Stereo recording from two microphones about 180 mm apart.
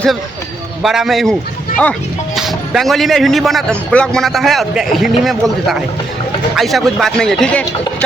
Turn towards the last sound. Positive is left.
turn(degrees=5)  # may be behind; listen again after turning